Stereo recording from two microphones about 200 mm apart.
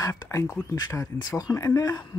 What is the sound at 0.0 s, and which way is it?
Speech, 15° left (ahead or behind).